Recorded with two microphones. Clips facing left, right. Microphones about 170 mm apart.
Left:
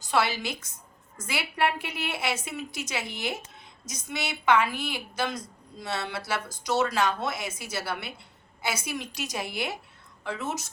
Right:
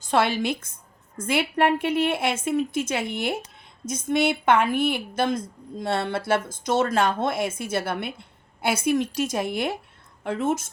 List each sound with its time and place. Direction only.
0.0 s a woman's voice: 50° right (ahead or behind)